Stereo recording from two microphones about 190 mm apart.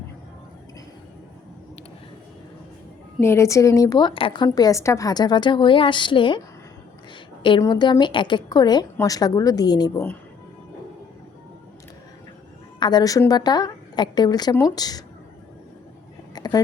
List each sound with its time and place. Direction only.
3.2 s a woman's voice: 15° left (ahead or behind)
7.4 s a woman's voice: 25° left (ahead or behind)
12.8 s a woman's voice: 20° left (ahead or behind)
16.3 s a sound: 20° left (ahead or behind)